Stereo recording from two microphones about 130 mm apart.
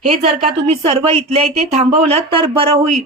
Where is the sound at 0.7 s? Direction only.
40° right (ahead or behind).